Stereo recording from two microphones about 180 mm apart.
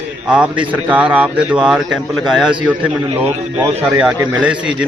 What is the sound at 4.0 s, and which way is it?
Speech, 5° right (ahead or behind).